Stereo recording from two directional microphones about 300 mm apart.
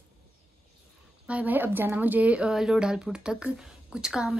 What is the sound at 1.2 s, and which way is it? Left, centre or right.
A woman's voice, centre.